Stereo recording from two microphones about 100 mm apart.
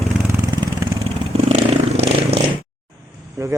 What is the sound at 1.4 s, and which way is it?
Vehicle, 90° right.